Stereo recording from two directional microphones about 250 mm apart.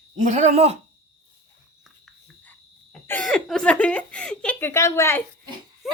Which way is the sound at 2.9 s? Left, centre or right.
Centre.